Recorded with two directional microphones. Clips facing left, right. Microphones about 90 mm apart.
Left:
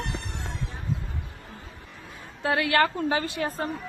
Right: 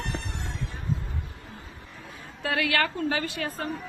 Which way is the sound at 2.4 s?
30° left (ahead or behind).